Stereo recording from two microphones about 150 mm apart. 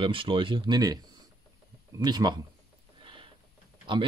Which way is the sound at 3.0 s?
35° right (ahead or behind).